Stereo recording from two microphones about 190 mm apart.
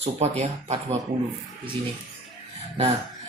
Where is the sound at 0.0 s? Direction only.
35° right (ahead or behind).